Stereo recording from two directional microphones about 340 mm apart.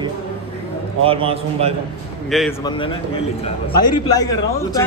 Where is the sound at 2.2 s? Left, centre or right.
Centre.